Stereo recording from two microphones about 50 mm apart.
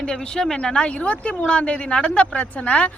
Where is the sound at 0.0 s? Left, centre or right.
Centre.